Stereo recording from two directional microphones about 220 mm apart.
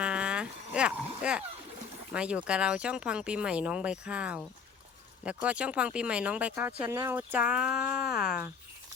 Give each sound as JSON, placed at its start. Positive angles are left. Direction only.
{"t": 0.0, "sound": "dog", "side_deg": -5}
{"t": 2.1, "sound": "speech", "side_deg": -5}